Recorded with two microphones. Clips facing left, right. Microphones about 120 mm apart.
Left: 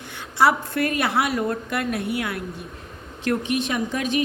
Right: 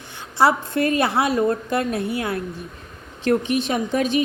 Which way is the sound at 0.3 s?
30° right (ahead or behind).